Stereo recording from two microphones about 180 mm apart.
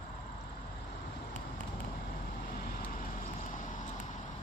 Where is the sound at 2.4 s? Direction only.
55° left (ahead or behind).